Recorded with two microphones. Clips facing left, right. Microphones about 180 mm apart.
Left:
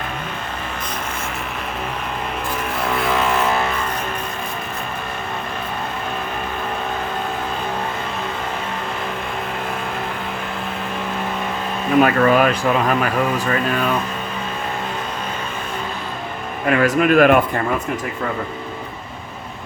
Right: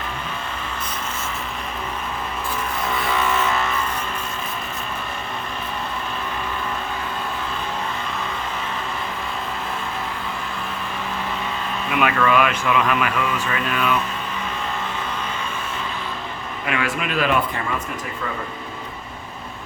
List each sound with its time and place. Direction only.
2.8 s vehicle: 60° left (ahead or behind)
11.9 s speech: 40° left (ahead or behind)
16.6 s a man's voice: 45° left (ahead or behind)